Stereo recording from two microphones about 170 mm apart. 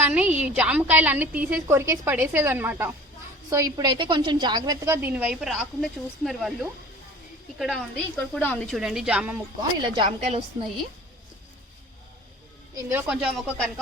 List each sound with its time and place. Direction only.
0.0 s a woman's voice: 10° right (ahead or behind)
5.0 s a woman's voice: 5° right (ahead or behind)
8.4 s a woman's voice: 10° left (ahead or behind); by 9.3 s 5° right (ahead or behind)
9.6 s a woman's voice: 30° right (ahead or behind)
10.1 s a woman's voice: 40° right (ahead or behind)
12.7 s a woman's voice: 10° right (ahead or behind)